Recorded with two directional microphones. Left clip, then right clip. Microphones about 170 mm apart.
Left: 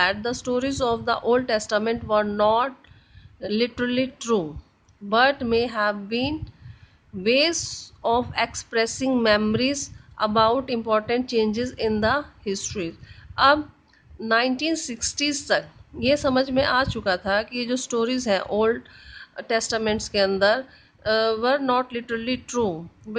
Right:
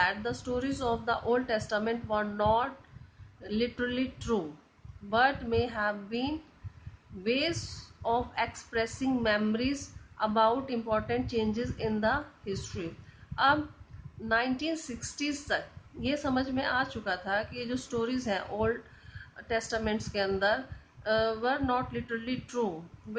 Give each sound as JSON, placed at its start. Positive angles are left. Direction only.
{"t": 0.0, "sound": "a woman's voice", "side_deg": 55}